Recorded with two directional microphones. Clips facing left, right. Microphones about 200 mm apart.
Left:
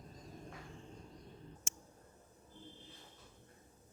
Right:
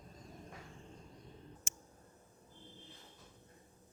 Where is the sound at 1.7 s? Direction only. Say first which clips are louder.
Even; 55° right (ahead or behind).